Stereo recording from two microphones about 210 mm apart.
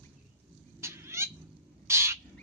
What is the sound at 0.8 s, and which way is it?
Cat, 10° right (ahead or behind).